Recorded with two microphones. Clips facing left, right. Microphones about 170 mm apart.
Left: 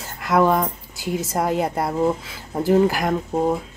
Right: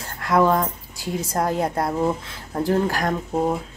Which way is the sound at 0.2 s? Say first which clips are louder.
Left 1 dB; 5° left (ahead or behind).